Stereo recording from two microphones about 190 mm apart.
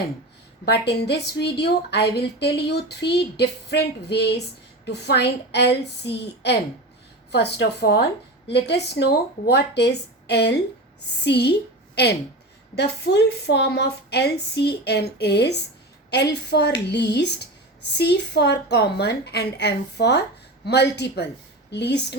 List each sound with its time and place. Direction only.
0.6 s a woman's voice: 60° left (ahead or behind)
12.7 s a woman's voice: 60° left (ahead or behind)